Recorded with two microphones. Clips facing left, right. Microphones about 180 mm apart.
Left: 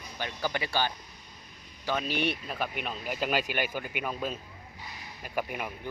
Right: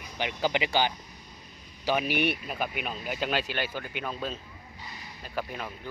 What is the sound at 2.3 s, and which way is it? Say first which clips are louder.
Speech: right 1 dB; 5° right (ahead or behind).